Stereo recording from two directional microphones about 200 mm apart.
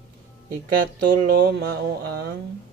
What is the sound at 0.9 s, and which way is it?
Speech, 45° right (ahead or behind).